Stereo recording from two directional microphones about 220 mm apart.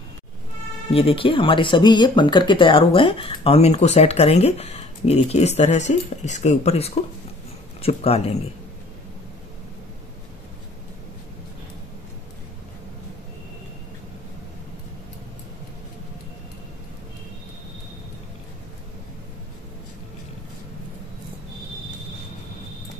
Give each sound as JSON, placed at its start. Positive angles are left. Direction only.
{"t": 0.8, "sound": "speech", "side_deg": 25}